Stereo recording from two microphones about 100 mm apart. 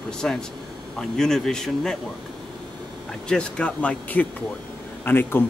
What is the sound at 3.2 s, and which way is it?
Speech, 10° left (ahead or behind).